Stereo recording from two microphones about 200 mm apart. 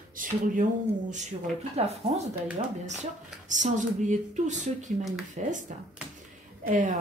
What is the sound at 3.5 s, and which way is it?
Speech, 40° right (ahead or behind).